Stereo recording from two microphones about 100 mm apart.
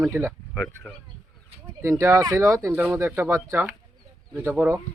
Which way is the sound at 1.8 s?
30° right (ahead or behind).